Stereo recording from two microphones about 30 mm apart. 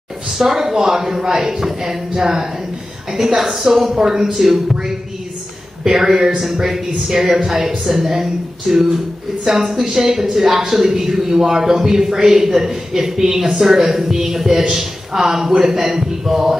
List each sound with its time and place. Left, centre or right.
0.4 s a man's voice: centre
3.9 s speech: right
4.3 s a man's voice: centre
5.9 s a man's voice: centre